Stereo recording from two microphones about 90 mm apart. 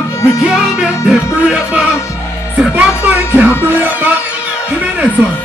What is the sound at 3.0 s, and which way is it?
Music, 15° right (ahead or behind).